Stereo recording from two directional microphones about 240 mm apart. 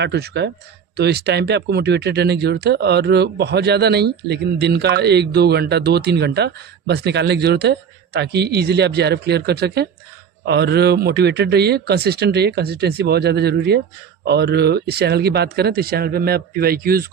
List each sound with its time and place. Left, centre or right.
0.0 s speech: right